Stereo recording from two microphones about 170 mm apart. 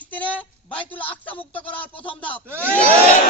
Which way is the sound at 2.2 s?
10° left (ahead or behind).